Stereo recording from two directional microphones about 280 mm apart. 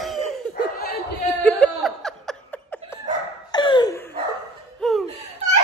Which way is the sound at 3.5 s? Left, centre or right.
Centre.